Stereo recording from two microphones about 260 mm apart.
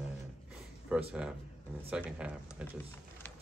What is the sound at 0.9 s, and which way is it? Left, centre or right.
Speech, centre.